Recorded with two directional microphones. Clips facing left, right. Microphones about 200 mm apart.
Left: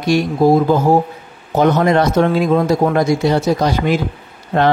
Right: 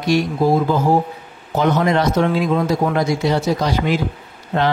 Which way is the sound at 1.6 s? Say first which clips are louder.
Left 4 dB; 50° left (ahead or behind).